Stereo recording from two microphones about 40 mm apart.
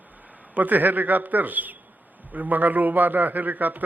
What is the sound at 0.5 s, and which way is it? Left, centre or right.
A man's voice, right.